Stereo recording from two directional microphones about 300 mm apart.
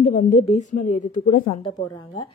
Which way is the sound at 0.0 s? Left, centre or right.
Left.